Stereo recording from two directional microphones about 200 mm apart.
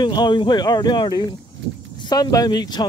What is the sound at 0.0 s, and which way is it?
Speech, 20° left (ahead or behind).